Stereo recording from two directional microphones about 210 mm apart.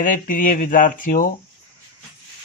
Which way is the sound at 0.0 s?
40° left (ahead or behind).